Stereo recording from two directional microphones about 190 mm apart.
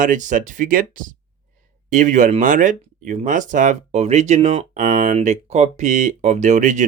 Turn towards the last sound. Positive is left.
turn(degrees=-40)  # may be behind; listen again after turning